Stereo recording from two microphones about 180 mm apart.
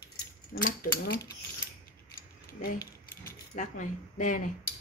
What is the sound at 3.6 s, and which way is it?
Speech, 45° left (ahead or behind).